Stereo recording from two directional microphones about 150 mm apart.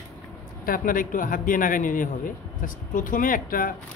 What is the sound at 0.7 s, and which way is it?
Speech, 65° left (ahead or behind).